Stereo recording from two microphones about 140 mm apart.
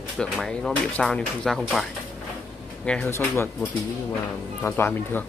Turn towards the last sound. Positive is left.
turn(degrees=15)  # may be behind; listen again after turning